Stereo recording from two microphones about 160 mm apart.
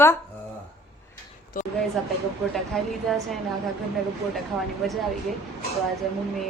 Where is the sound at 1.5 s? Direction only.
60° left (ahead or behind).